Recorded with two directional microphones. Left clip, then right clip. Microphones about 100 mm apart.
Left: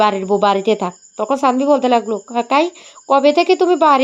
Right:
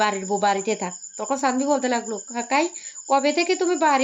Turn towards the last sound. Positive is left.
turn(degrees=50)  # may be behind; listen again after turning